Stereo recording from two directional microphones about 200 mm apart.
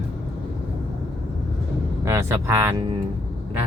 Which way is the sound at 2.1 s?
15° right (ahead or behind).